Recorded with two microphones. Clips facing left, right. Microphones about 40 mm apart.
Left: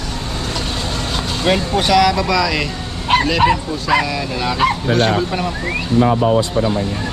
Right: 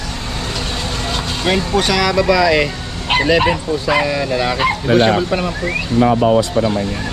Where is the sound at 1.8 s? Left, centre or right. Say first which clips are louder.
Left 1 dB; centre.